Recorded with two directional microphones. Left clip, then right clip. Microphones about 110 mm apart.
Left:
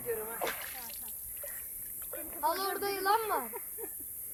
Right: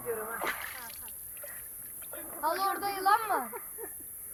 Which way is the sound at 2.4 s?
40° left (ahead or behind).